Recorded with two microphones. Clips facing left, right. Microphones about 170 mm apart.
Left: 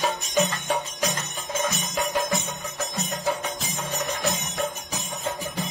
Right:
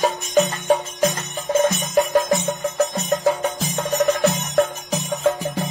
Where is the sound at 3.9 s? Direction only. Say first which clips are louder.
Right 10 dB; 70° right (ahead or behind).